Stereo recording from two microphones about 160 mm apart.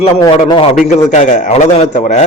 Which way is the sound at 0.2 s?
30° left (ahead or behind).